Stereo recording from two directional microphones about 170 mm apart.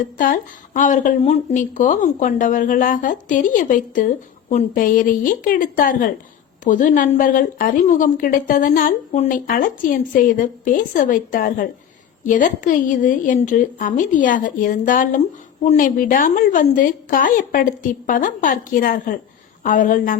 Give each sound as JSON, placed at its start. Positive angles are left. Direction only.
{"t": 0.2, "sound": "a woman's voice", "side_deg": 50}